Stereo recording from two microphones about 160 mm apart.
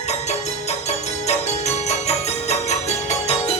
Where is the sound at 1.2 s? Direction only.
45° left (ahead or behind).